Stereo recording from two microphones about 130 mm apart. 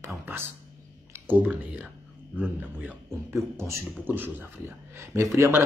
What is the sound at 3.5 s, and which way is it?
Speech, 20° right (ahead or behind).